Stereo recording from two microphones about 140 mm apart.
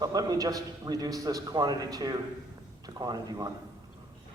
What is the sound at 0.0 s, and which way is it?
A man's voice, 25° right (ahead or behind).